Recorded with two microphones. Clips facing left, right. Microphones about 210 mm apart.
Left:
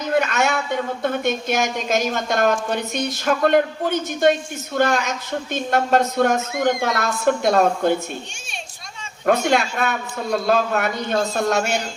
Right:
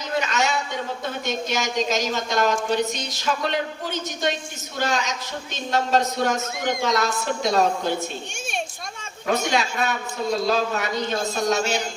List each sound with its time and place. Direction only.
0.1 s a sound: 55° left (ahead or behind)
1.0 s a woman's voice: 55° left (ahead or behind)
9.2 s a woman's voice: 55° left (ahead or behind)